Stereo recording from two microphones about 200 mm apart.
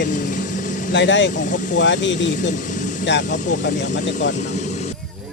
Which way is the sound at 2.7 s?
40° left (ahead or behind).